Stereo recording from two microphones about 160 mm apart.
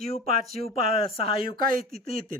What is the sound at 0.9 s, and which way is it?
Speech, 35° left (ahead or behind).